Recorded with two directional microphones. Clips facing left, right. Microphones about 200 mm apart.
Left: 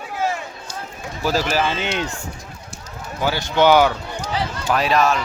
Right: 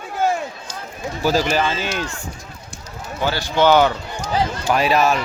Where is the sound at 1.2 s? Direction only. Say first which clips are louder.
Right 2 dB; centre (ahead or behind).